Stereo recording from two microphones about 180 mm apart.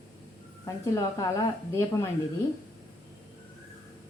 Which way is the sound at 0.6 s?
15° left (ahead or behind).